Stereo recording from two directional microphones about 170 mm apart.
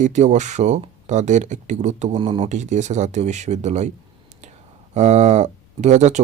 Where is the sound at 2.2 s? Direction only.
30° right (ahead or behind).